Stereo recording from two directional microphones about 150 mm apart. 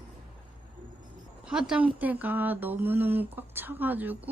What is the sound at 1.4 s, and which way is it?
Speech, 5° right (ahead or behind).